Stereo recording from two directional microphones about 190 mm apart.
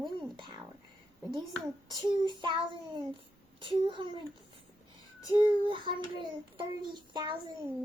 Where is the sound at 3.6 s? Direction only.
25° right (ahead or behind).